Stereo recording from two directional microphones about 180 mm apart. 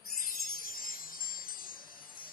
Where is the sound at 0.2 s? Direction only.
55° left (ahead or behind).